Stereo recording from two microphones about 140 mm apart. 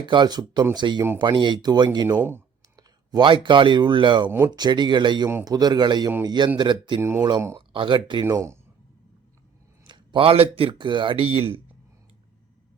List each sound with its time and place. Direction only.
0.0 s speech: 30° right (ahead or behind)
4.3 s speech: 15° right (ahead or behind)
4.5 s a man's voice: 30° right (ahead or behind)
8.2 s a man's voice: 20° right (ahead or behind)
9.8 s speech: 35° right (ahead or behind)